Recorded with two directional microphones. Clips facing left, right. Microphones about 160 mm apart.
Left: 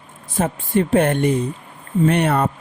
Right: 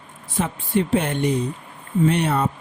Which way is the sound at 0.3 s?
50° left (ahead or behind).